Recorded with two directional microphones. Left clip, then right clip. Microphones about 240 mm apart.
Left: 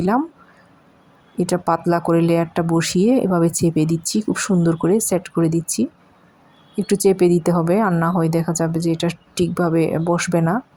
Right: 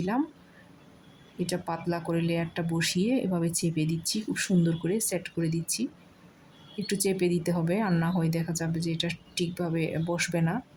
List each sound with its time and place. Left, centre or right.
1.4 s speech: left